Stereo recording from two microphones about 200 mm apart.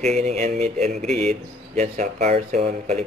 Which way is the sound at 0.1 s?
35° right (ahead or behind).